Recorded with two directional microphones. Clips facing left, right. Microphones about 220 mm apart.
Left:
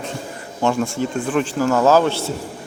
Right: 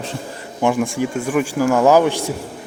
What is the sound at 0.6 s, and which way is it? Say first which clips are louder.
Speech: right 2 dB; 15° right (ahead or behind).